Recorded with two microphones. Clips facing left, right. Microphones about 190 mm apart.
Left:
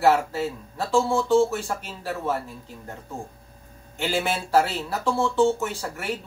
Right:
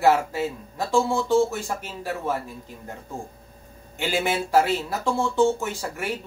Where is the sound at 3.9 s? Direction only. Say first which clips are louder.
Right 1 dB; 15° right (ahead or behind).